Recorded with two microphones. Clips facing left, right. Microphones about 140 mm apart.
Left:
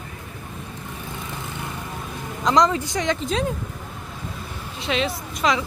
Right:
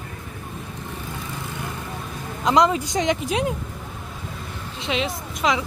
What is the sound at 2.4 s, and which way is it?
Speech, 10° right (ahead or behind).